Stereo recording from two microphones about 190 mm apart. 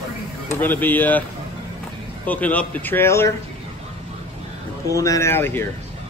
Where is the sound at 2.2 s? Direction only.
10° left (ahead or behind).